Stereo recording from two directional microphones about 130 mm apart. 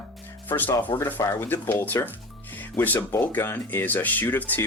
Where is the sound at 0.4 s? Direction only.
15° left (ahead or behind).